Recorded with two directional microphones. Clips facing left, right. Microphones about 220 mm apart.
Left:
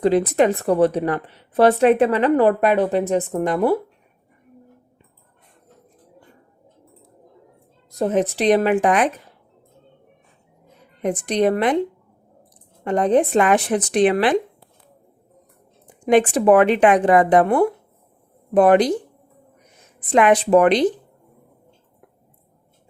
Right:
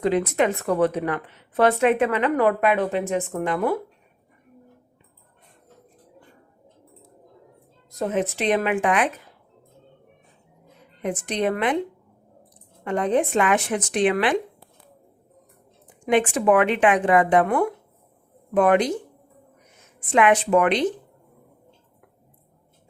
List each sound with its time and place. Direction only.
0.0 s a woman's voice: 35° left (ahead or behind)
7.9 s a woman's voice: 35° left (ahead or behind)
11.0 s a woman's voice: 35° left (ahead or behind)
12.8 s a woman's voice: 40° left (ahead or behind)
16.0 s a woman's voice: 40° left (ahead or behind)
20.0 s a woman's voice: 35° left (ahead or behind)